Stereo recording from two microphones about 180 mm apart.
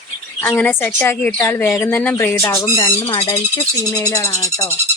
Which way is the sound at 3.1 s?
30° left (ahead or behind).